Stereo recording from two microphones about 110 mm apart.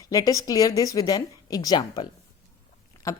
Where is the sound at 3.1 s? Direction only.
30° left (ahead or behind).